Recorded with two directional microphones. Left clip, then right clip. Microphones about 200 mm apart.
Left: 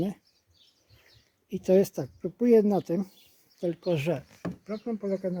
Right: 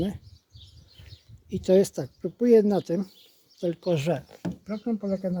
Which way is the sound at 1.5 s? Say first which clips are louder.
Right 2 dB; centre (ahead or behind).